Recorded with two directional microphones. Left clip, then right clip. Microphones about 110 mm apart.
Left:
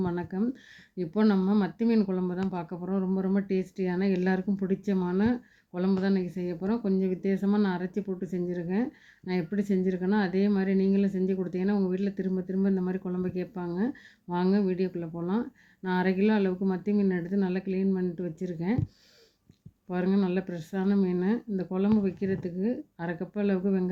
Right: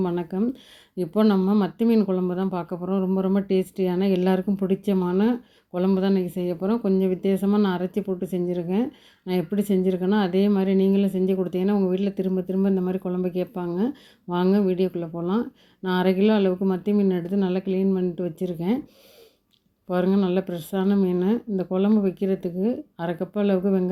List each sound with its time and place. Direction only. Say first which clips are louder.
0.0 s speech: right 6 dB; 10° right (ahead or behind)
19.9 s speech: right 6 dB; 10° right (ahead or behind)